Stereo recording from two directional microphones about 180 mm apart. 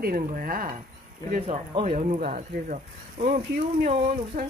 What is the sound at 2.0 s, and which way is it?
Speech, 40° right (ahead or behind).